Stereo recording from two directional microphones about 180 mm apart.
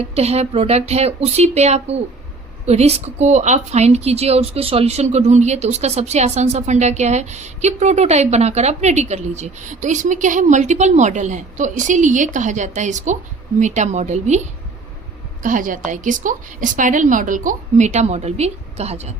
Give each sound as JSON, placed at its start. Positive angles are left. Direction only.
{"t": 0.0, "sound": "a woman's voice", "side_deg": -35}
{"t": 15.4, "sound": "a woman's voice", "side_deg": -45}